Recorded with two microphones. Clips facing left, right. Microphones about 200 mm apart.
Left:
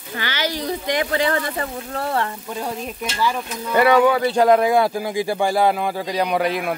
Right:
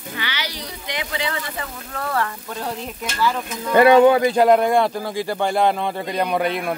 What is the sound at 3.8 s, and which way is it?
Speech, 20° right (ahead or behind).